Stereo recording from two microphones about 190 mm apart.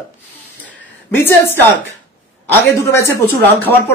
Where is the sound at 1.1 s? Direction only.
10° left (ahead or behind).